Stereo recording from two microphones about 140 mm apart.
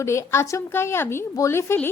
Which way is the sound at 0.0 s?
20° left (ahead or behind).